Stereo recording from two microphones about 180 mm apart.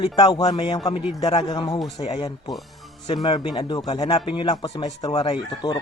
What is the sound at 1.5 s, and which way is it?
Speech, 25° left (ahead or behind).